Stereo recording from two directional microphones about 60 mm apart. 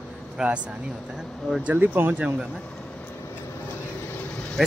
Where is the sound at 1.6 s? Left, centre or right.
Right.